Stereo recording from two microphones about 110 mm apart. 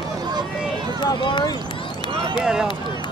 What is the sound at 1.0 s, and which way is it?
Speech, 40° left (ahead or behind).